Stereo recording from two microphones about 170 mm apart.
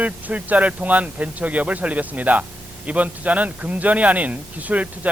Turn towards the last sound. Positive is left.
turn(degrees=-10)  # may be behind; listen again after turning